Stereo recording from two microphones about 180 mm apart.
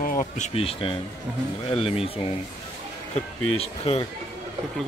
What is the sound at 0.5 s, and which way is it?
Speech, 30° left (ahead or behind).